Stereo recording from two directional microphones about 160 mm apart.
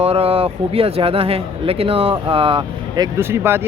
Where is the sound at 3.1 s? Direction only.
15° right (ahead or behind).